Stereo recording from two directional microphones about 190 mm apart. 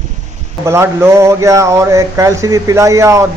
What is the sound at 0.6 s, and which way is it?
Speech, 15° right (ahead or behind).